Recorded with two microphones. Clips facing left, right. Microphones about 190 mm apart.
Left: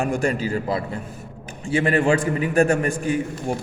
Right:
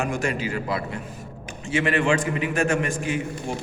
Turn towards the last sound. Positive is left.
turn(degrees=35)  # may be behind; listen again after turning